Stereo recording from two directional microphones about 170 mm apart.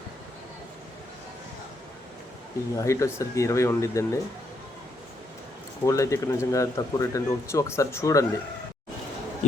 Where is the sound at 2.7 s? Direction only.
15° left (ahead or behind).